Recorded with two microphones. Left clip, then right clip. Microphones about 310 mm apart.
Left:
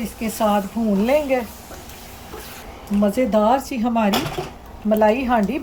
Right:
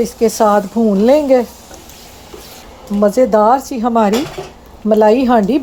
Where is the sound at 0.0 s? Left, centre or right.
Right.